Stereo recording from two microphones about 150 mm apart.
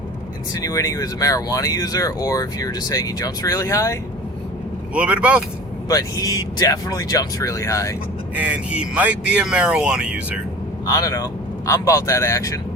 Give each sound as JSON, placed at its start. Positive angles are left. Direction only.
{"t": 0.5, "sound": "speech", "side_deg": 25}
{"t": 4.9, "sound": "speech", "side_deg": -10}
{"t": 5.9, "sound": "speech", "side_deg": 25}
{"t": 8.4, "sound": "speech", "side_deg": -10}
{"t": 10.8, "sound": "speech", "side_deg": 20}